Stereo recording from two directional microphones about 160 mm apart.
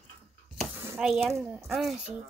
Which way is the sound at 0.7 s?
15° right (ahead or behind).